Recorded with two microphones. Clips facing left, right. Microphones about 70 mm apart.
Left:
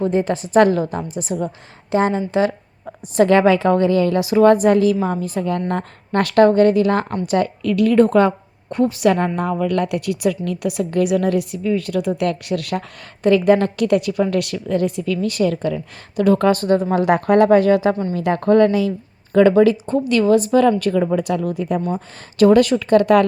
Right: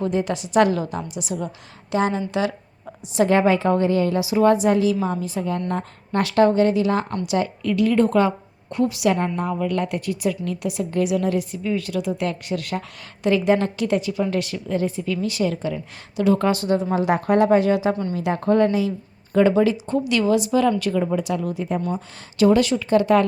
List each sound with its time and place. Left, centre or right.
0.0 s a woman's voice: left
2.3 s a sound: left
3.2 s a woman's voice: left
4.2 s speech: left
7.6 s a woman's voice: left
9.0 s a woman's voice: left
13.2 s a woman's voice: left